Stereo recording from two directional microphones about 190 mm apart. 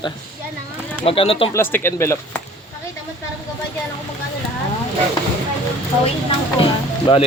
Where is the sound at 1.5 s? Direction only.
10° left (ahead or behind).